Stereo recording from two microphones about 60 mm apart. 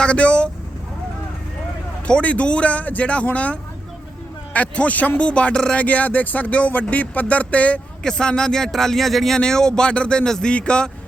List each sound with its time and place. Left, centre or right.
0.0 s speech: centre
2.0 s speech: centre
8.0 s speech: centre